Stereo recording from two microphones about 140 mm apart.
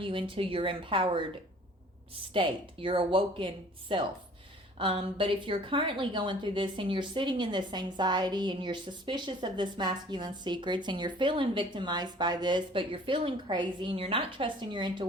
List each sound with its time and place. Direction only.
0.0 s a woman's voice: 40° right (ahead or behind)
2.3 s a woman's voice: 35° right (ahead or behind)